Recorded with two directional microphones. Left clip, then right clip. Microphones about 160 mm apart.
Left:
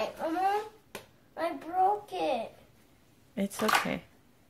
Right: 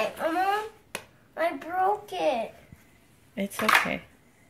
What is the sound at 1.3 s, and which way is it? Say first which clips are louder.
A child's voice: right 4 dB; 10° left (ahead or behind).